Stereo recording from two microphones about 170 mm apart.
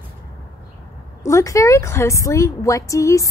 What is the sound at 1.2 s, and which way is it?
A woman's voice, 20° left (ahead or behind).